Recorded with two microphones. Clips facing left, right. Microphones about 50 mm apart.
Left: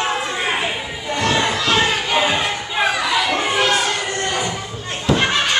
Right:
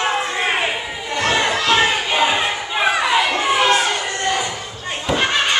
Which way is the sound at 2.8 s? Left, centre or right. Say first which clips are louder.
Right 2 dB; right.